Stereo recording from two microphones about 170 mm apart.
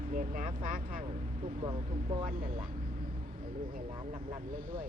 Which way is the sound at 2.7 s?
50° right (ahead or behind).